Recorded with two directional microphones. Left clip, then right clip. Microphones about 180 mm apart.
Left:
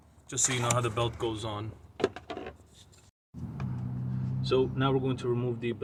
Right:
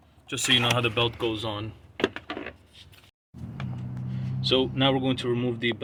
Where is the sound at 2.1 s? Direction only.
25° right (ahead or behind).